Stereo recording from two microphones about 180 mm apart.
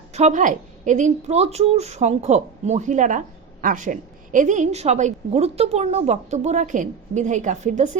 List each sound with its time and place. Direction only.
0.1 s a woman's voice: 40° right (ahead or behind)